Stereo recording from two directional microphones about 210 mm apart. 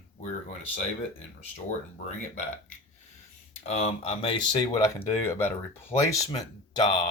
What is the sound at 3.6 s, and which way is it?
Speech, 30° left (ahead or behind).